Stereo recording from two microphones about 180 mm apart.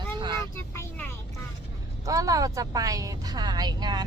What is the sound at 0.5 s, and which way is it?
Speech, 15° left (ahead or behind).